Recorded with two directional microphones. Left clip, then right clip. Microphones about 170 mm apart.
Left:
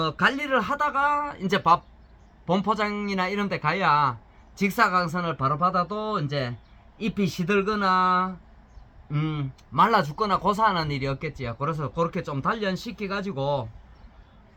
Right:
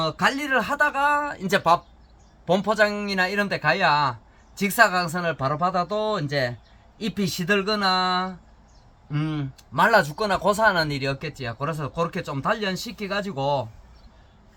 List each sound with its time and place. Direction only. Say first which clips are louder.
0.1 s speech: right 1 dB; centre (ahead or behind)